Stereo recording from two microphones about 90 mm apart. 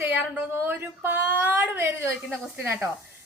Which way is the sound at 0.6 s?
25° right (ahead or behind).